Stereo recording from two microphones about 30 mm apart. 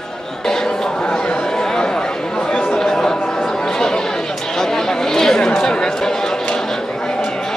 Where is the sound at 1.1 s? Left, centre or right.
Left.